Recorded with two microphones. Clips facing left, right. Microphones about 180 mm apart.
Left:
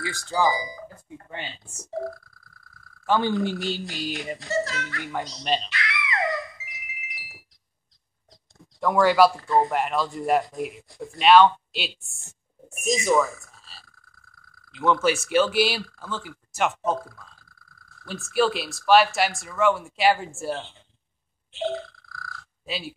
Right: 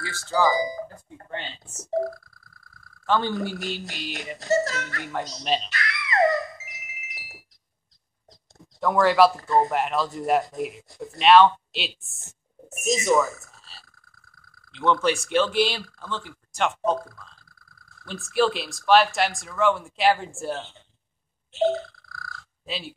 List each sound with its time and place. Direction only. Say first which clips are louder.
0.0 s speech: right 1 dB; 15° left (ahead or behind)
3.1 s speech: left 2 dB; 15° left (ahead or behind)
3.5 s speech: left 3 dB; 30° left (ahead or behind)
4.4 s speech: right 7 dB; 40° right (ahead or behind)
5.4 s speech: even; centre (ahead or behind)
5.7 s a sound: even; 40° right (ahead or behind)
8.7 s speech: even; centre (ahead or behind)
21.5 s burping: right 6 dB; 40° right (ahead or behind)
22.7 s speech: left 1 dB; centre (ahead or behind)